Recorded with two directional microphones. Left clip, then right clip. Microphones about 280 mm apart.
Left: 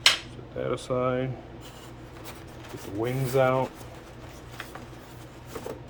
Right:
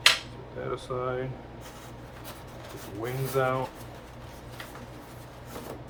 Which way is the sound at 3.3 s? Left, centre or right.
Left.